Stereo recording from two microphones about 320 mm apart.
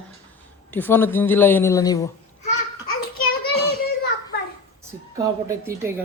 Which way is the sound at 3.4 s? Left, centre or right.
Left.